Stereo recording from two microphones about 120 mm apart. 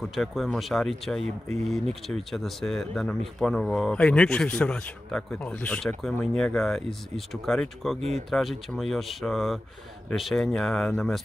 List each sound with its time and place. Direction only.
0.0 s speech: centre (ahead or behind)